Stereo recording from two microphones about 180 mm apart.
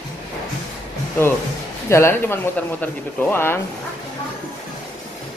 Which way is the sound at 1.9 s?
15° left (ahead or behind).